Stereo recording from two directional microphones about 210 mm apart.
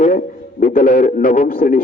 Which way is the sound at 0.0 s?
40° left (ahead or behind).